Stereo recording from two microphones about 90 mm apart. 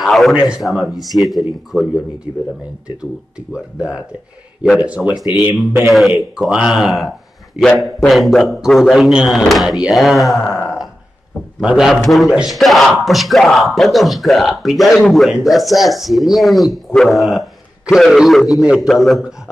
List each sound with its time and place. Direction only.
0.0 s speech: centre (ahead or behind)
4.7 s speech: 15° right (ahead or behind)
5.6 s speech: centre (ahead or behind)
8.1 s speech: centre (ahead or behind)
11.6 s speech: 5° right (ahead or behind)